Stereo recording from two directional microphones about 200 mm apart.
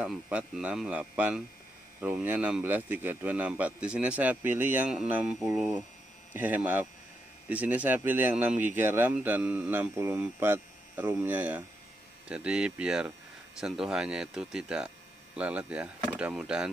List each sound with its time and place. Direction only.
0.0 s speech: 5° right (ahead or behind)